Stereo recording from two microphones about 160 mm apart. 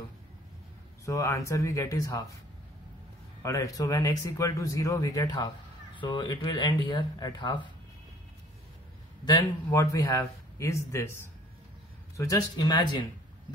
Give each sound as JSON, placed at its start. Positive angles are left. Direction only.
{"t": 1.0, "sound": "speech", "side_deg": 20}
{"t": 3.4, "sound": "speech", "side_deg": 20}
{"t": 9.2, "sound": "speech", "side_deg": 20}
{"t": 12.2, "sound": "speech", "side_deg": 20}